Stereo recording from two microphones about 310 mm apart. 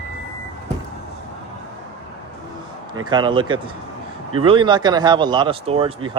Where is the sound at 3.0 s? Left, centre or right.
Centre.